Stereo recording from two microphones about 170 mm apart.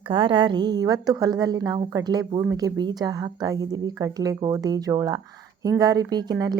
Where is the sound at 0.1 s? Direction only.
30° right (ahead or behind).